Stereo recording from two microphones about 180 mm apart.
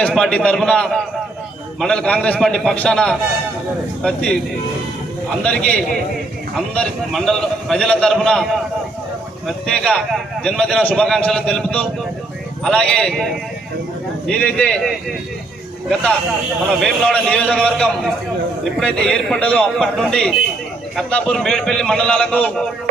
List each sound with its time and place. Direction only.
0.0 s a man's voice: 5° left (ahead or behind)
5.4 s a man's voice: 5° left (ahead or behind)
9.5 s a man's voice: 5° left (ahead or behind)
14.3 s a man's voice: 5° left (ahead or behind)
16.6 s a man's voice: centre (ahead or behind)